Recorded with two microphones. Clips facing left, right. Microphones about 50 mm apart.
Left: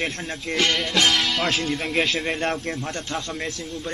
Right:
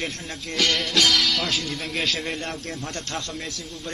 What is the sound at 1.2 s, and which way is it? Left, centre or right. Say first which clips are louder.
Music: left 1 dB; centre.